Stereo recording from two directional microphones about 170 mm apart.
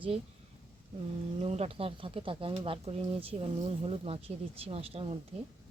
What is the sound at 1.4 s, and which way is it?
Speech, 35° right (ahead or behind).